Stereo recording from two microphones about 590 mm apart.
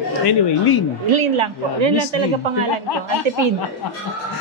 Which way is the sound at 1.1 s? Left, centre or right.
Right.